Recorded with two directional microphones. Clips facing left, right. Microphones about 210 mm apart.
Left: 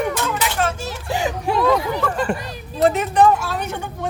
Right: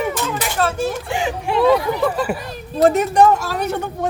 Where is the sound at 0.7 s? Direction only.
55° right (ahead or behind).